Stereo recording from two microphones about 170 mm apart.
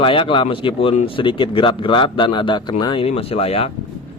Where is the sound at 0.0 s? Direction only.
30° left (ahead or behind).